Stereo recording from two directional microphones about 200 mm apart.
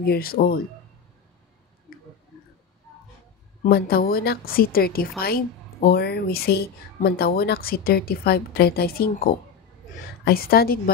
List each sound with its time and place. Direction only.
0.0 s speech: 50° left (ahead or behind)
3.6 s speech: 50° left (ahead or behind)